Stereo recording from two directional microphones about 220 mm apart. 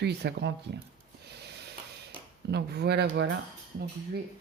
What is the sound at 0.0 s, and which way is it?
Speech, 50° right (ahead or behind).